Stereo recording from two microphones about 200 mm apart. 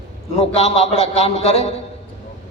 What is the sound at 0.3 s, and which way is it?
A man's voice, 30° left (ahead or behind).